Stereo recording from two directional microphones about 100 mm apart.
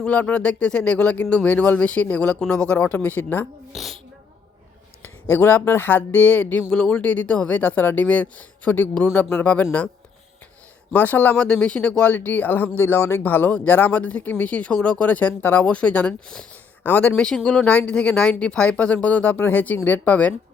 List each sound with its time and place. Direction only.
0.0 s speech: 15° left (ahead or behind)
3.7 s a woman's voice: centre (ahead or behind)
5.3 s speech: 20° left (ahead or behind)
10.9 s speech: 15° left (ahead or behind)